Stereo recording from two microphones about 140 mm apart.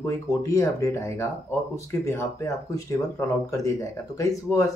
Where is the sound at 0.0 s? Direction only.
20° left (ahead or behind).